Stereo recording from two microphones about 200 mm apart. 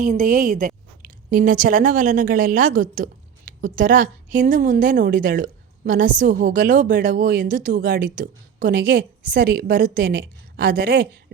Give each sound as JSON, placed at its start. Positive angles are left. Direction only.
{"t": 0.0, "sound": "a woman's voice", "side_deg": -45}